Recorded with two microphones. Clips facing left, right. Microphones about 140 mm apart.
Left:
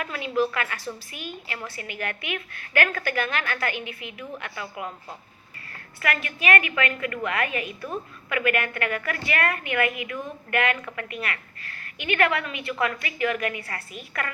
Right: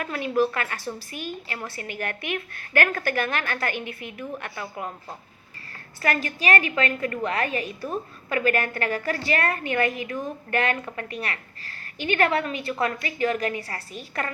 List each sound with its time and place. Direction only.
0.0 s a woman's voice: 40° right (ahead or behind)
6.0 s a woman's voice: 35° right (ahead or behind)